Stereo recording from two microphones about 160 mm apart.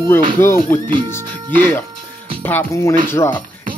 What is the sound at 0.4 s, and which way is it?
Speech, 15° left (ahead or behind).